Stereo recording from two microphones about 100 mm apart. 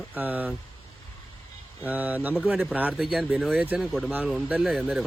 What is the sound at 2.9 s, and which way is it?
Speech, centre (ahead or behind).